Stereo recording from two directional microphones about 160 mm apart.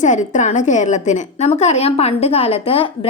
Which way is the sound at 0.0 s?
50° left (ahead or behind).